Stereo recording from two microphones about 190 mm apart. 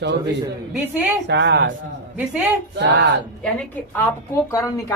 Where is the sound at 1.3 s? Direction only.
75° right (ahead or behind).